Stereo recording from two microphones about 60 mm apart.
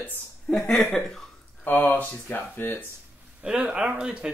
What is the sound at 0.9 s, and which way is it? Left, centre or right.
Speech, centre.